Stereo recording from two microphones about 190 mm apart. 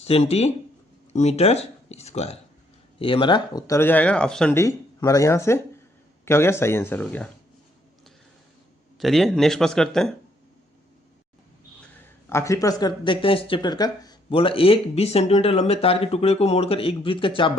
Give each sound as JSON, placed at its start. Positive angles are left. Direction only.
{"t": 0.0, "sound": "speech", "side_deg": 30}
{"t": 4.5, "sound": "speech", "side_deg": 15}
{"t": 9.0, "sound": "speech", "side_deg": 0}
{"t": 12.3, "sound": "speech", "side_deg": 15}